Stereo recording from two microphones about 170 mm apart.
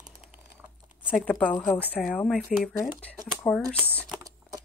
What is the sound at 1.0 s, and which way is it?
A woman's voice, 5° right (ahead or behind).